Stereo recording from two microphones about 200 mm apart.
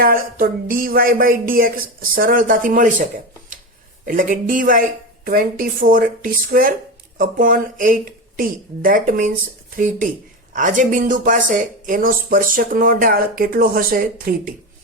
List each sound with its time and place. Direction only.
0.0 s speech: 45° right (ahead or behind)
4.0 s speech: 40° right (ahead or behind)